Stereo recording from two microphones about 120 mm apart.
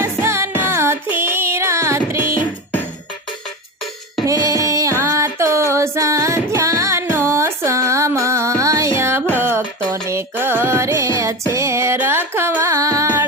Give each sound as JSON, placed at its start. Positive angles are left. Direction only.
{"t": 0.0, "sound": "music", "side_deg": -20}
{"t": 4.3, "sound": "music", "side_deg": -30}